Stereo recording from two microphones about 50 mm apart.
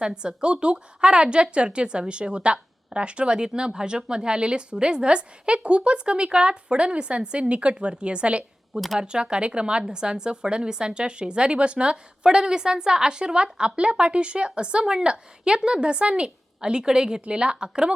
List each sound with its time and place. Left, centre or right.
0.0 s speech: centre